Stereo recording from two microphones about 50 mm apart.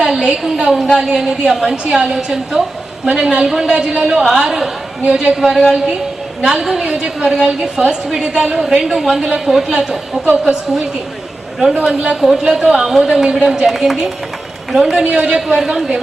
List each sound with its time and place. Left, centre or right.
0.0 s a woman's voice: centre
5.0 s a woman's voice: centre
5.3 s a woman's voice: centre
11.9 s a woman's voice: centre
15.1 s a woman's voice: centre